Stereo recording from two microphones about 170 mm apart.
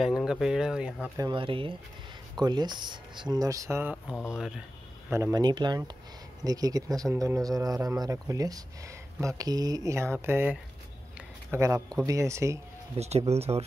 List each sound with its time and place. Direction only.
0.0 s speech: centre (ahead or behind)
1.1 s speech: 25° right (ahead or behind); by 4.6 s 5° right (ahead or behind)
5.1 s speech: 20° right (ahead or behind)
12.9 s speech: 40° right (ahead or behind)